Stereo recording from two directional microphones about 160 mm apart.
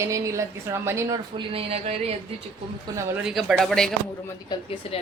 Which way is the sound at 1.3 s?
35° right (ahead or behind).